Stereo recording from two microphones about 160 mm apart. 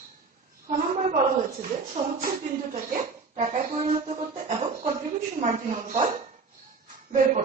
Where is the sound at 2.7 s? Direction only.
45° right (ahead or behind).